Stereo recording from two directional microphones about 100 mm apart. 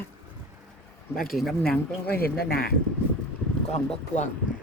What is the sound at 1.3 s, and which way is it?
Speech, 5° left (ahead or behind).